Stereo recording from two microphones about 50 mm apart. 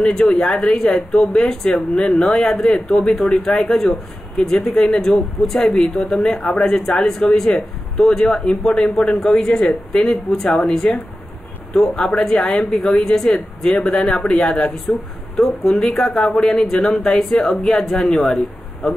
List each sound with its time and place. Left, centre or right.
0.0 s a woman's voice: centre